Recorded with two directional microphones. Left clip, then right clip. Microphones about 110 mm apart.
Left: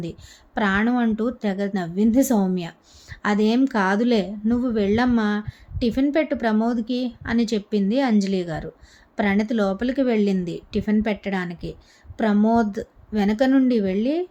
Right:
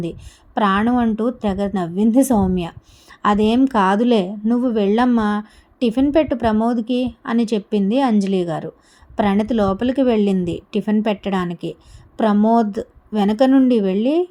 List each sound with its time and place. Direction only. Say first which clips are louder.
0.0 s a woman's voice: right 6 dB; 20° right (ahead or behind)